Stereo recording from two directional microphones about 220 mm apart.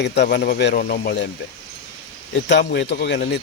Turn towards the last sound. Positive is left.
turn(degrees=50)  # may be behind; listen again after turning